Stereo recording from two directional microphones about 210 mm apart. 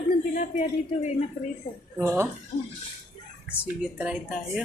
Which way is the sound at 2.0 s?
10° right (ahead or behind).